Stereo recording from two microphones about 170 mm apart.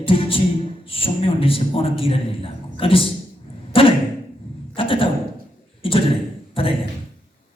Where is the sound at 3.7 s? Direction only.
30° left (ahead or behind).